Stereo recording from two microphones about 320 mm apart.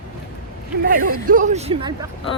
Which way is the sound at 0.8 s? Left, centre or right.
Right.